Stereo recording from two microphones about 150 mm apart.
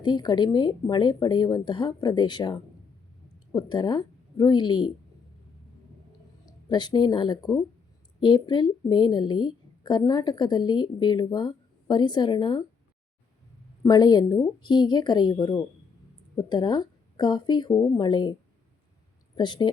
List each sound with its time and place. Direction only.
0.0 s a woman's voice: 30° left (ahead or behind)
6.4 s a woman's voice: 30° left (ahead or behind)
13.8 s a woman's voice: 25° left (ahead or behind)
19.4 s speech: 30° left (ahead or behind)